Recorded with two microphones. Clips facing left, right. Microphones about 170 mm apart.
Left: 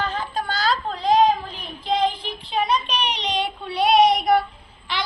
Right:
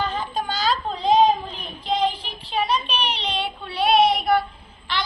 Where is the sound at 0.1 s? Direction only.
15° right (ahead or behind).